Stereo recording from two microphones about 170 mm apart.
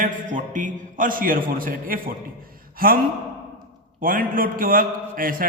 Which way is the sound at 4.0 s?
55° right (ahead or behind).